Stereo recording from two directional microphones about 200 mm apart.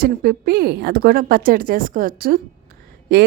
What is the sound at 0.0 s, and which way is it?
Speech, 45° right (ahead or behind).